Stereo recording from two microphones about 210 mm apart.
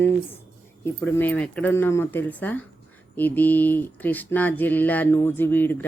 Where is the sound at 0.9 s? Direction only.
10° left (ahead or behind).